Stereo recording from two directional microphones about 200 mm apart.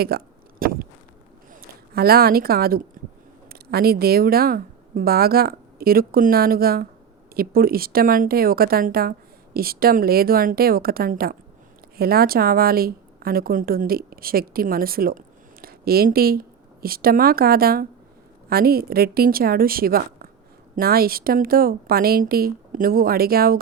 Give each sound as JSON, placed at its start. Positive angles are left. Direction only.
{"t": 0.1, "sound": "a woman's voice", "side_deg": -50}
{"t": 0.6, "sound": "a sound", "side_deg": -45}
{"t": 1.9, "sound": "a woman's voice", "side_deg": -50}